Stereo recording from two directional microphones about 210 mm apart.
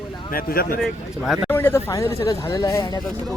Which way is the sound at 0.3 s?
45° left (ahead or behind).